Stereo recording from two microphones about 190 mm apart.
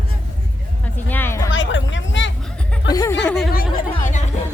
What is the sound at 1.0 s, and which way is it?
Music, 10° left (ahead or behind).